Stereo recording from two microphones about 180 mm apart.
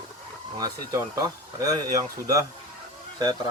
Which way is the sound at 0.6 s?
20° right (ahead or behind).